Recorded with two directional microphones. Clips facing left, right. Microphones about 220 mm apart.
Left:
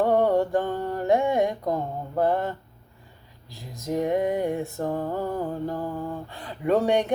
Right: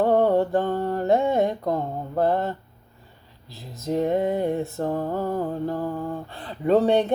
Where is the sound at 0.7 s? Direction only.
40° right (ahead or behind).